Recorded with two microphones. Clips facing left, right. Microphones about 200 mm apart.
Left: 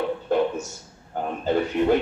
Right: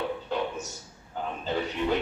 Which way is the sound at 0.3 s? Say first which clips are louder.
Left 10 dB; 50° left (ahead or behind).